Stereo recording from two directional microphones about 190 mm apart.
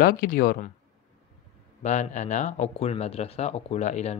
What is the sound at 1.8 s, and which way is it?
Speech, 40° left (ahead or behind).